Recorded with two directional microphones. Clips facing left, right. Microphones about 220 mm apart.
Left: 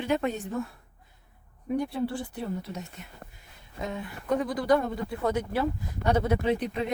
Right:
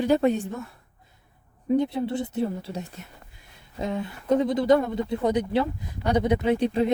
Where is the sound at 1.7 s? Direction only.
20° right (ahead or behind).